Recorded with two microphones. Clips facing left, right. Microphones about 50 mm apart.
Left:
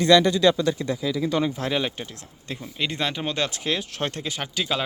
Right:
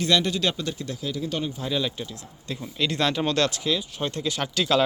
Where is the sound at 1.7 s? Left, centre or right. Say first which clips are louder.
Left 1 dB; left.